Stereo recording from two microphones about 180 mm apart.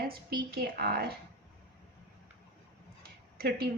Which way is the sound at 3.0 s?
60° right (ahead or behind).